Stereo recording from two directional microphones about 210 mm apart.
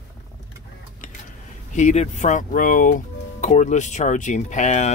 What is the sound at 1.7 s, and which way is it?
Speech, 35° left (ahead or behind).